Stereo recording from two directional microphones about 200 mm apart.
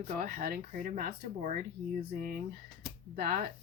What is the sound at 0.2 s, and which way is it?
Speech, 45° right (ahead or behind).